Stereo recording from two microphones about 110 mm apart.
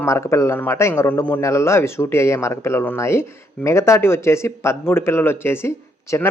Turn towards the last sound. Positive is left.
turn(degrees=25)  # may be behind; listen again after turning